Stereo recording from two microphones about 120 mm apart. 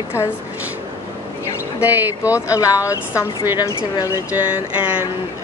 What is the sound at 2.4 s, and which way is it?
A woman's voice, 25° left (ahead or behind).